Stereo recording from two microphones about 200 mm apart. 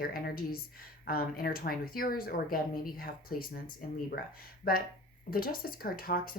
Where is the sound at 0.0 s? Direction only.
45° left (ahead or behind).